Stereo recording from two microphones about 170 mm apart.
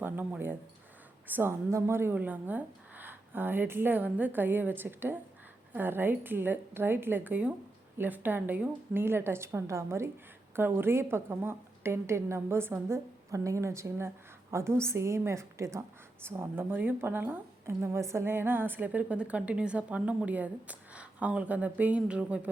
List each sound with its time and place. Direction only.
0.0 s a woman's voice: 10° right (ahead or behind)